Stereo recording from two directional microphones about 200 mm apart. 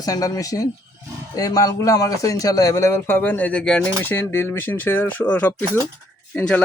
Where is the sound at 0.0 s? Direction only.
20° left (ahead or behind).